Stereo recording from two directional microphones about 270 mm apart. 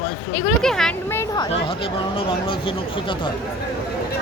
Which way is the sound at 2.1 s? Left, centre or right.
Centre.